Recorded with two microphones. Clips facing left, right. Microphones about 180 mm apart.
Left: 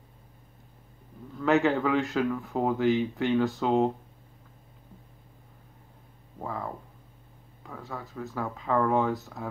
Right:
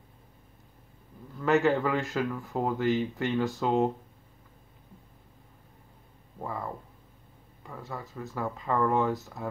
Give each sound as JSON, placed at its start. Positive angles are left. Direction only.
{"t": 1.4, "sound": "speech", "side_deg": 0}
{"t": 6.4, "sound": "speech", "side_deg": 0}